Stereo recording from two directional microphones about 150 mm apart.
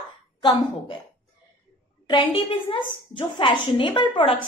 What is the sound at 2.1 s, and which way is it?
A woman's voice, 30° left (ahead or behind).